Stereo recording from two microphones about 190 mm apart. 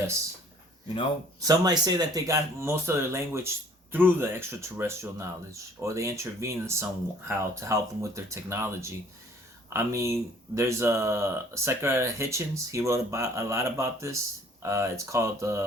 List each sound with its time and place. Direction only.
1.4 s speech: 20° right (ahead or behind)